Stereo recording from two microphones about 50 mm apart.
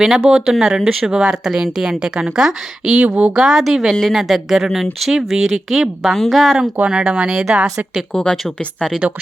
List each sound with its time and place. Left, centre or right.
0.3 s speech: centre
3.0 s speech: right
3.3 s speech: centre
6.7 s speech: right
8.1 s a woman's voice: left